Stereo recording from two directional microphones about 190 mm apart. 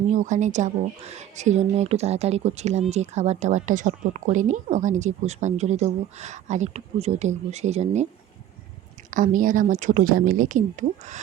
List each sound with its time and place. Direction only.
0.1 s speech: 40° right (ahead or behind)
9.0 s speech: 45° right (ahead or behind)